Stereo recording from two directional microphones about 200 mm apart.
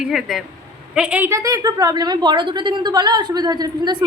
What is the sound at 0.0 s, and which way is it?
A woman's voice, centre (ahead or behind).